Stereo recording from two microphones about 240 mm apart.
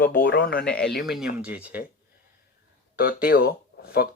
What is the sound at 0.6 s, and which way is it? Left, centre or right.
Speech, centre.